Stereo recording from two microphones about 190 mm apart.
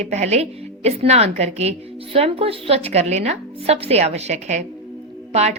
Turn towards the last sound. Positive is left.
turn(degrees=-35)  # may be behind; listen again after turning